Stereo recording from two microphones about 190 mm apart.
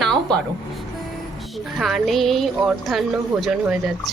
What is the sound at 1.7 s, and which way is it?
A woman's voice, centre (ahead or behind).